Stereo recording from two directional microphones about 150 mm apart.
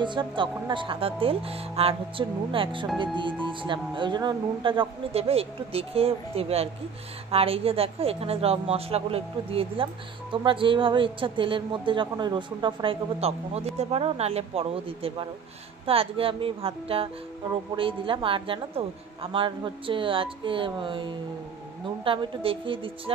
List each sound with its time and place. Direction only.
0.0 s a woman's voice: 30° right (ahead or behind)